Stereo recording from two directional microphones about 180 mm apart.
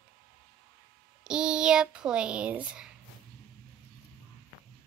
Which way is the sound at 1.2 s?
5° right (ahead or behind).